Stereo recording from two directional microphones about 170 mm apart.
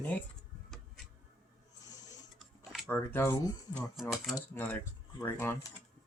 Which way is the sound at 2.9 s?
10° left (ahead or behind).